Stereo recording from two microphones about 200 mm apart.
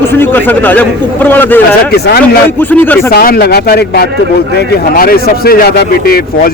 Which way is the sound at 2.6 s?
10° left (ahead or behind).